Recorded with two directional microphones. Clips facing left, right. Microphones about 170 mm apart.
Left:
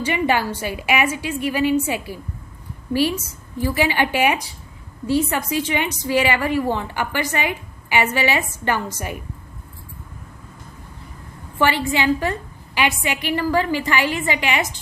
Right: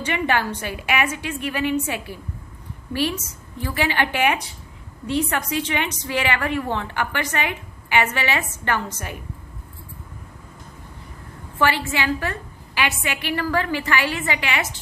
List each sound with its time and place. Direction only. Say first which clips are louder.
0.0 s a woman's voice: left 3 dB; 10° left (ahead or behind)
11.6 s a woman's voice: left 3 dB; 15° left (ahead or behind)